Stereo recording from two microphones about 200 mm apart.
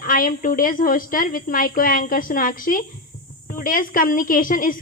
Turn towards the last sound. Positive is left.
turn(degrees=45)  # may be behind; listen again after turning